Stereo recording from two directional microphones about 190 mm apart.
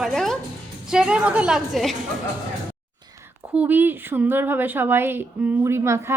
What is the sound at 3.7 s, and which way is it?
A woman's voice, 10° right (ahead or behind).